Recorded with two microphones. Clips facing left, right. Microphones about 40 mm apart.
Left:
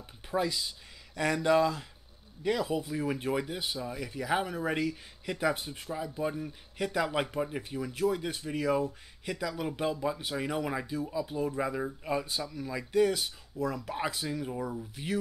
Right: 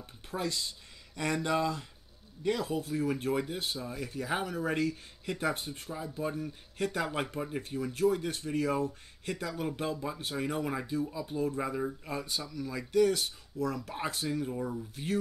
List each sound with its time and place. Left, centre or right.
0.0 s speech: centre
1.1 s speech: centre; by 4.3 s left
4.3 s speech: centre
9.8 s speech: left
10.7 s speech: centre